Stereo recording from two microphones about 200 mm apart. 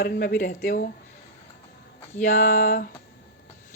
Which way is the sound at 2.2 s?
40° left (ahead or behind).